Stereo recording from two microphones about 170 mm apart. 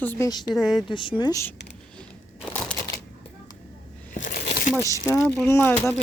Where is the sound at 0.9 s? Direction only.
30° left (ahead or behind).